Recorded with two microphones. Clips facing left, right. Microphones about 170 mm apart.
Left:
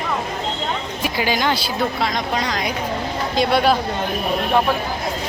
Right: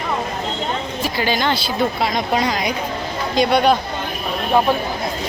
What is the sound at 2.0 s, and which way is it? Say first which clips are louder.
Speech: right 3 dB; 5° right (ahead or behind).